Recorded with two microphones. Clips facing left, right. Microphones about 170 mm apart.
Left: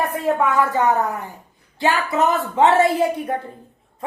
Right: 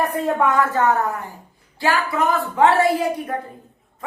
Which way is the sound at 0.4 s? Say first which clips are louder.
Right 1 dB; 10° left (ahead or behind).